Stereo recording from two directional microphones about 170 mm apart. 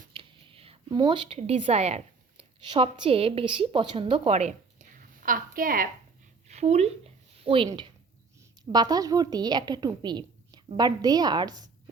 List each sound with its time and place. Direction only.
0.1 s whispering: 30° right (ahead or behind)
0.9 s a woman's voice: 25° right (ahead or behind); by 5.9 s 55° right (ahead or behind)
6.5 s a woman's voice: 40° right (ahead or behind); by 11.7 s 25° right (ahead or behind)